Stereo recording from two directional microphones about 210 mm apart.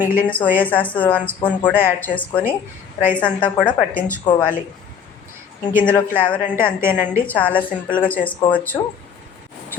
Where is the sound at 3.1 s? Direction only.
5° left (ahead or behind).